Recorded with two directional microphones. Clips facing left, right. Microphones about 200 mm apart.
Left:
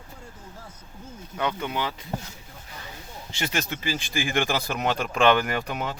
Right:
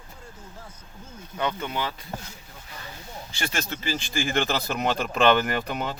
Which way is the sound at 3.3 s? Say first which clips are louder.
Left 2 dB; 20° left (ahead or behind).